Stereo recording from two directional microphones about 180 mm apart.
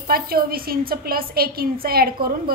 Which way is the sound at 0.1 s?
55° right (ahead or behind).